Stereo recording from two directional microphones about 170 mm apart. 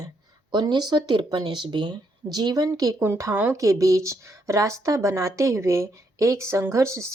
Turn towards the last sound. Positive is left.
turn(degrees=-15)  # may be behind; listen again after turning